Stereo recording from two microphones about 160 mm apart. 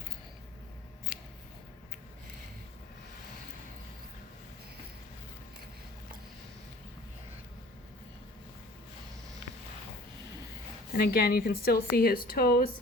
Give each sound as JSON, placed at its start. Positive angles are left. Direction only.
{"t": 10.9, "sound": "speech", "side_deg": 75}